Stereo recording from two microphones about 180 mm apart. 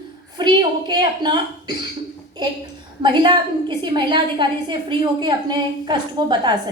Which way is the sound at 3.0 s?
25° right (ahead or behind).